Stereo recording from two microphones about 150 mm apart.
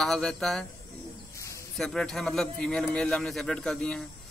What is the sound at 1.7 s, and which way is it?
A man's voice, 5° left (ahead or behind).